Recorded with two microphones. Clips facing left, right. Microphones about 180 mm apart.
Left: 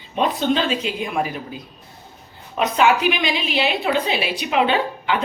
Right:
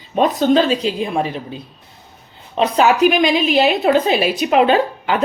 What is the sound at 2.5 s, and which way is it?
A woman's voice, 35° right (ahead or behind).